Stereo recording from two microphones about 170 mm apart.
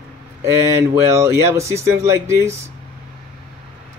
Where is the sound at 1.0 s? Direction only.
15° right (ahead or behind).